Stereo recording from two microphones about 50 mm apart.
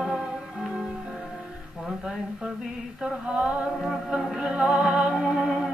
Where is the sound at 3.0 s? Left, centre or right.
Centre.